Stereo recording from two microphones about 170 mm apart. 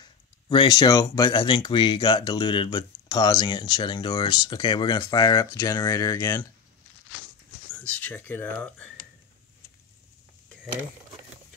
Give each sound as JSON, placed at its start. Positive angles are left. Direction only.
{"t": 0.0, "sound": "speech", "side_deg": 25}
{"t": 7.8, "sound": "speech", "side_deg": 10}